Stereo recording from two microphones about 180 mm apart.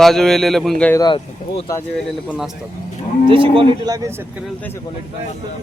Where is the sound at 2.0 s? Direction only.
Centre (ahead or behind).